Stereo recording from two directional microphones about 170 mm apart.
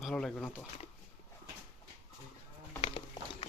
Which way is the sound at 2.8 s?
30° left (ahead or behind).